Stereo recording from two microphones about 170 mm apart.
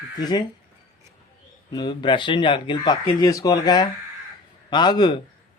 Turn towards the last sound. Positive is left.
turn(degrees=25)  # may be behind; listen again after turning